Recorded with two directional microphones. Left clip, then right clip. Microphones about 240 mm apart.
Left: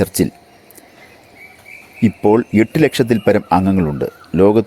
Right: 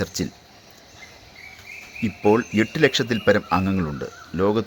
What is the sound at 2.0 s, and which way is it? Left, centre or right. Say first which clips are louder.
A man's voice: left 6 dB; left.